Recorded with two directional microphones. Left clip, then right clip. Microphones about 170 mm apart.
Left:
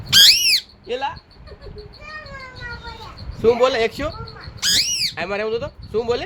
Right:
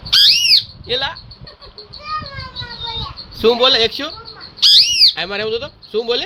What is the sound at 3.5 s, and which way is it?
Speech, centre (ahead or behind).